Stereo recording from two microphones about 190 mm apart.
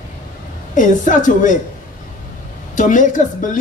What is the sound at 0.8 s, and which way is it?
Speech, 40° left (ahead or behind).